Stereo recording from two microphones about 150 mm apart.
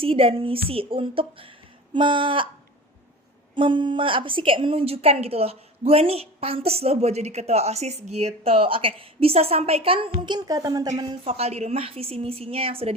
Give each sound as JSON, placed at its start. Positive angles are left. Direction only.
{"t": 0.0, "sound": "a woman's voice", "side_deg": -40}
{"t": 3.5, "sound": "a woman's voice", "side_deg": -30}
{"t": 11.3, "sound": "a woman's voice", "side_deg": -45}